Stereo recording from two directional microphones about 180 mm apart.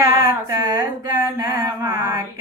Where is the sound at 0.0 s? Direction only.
20° right (ahead or behind).